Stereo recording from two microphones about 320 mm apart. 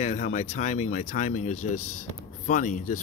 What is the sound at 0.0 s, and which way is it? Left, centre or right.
Speech, left.